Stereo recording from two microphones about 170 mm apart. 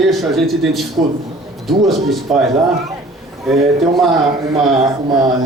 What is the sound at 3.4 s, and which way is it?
Speech, centre (ahead or behind).